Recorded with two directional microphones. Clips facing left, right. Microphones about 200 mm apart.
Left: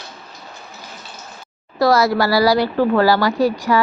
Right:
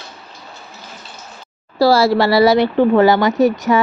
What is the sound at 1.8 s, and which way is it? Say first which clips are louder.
Speech: right 3 dB; 30° right (ahead or behind).